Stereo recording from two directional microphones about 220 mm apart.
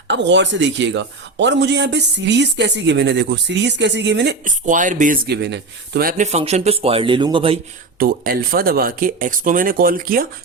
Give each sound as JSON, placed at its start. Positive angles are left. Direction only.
{"t": 0.1, "sound": "speech", "side_deg": -55}
{"t": 4.4, "sound": "speech", "side_deg": -35}
{"t": 7.9, "sound": "speech", "side_deg": -45}